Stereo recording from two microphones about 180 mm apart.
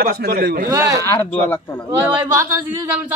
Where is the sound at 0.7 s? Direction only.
15° right (ahead or behind).